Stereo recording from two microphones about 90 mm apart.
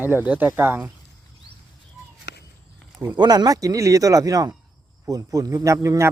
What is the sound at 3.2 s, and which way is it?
Speech, 50° right (ahead or behind).